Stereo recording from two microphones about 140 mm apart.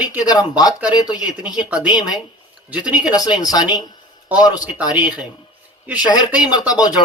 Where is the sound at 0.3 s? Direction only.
30° left (ahead or behind).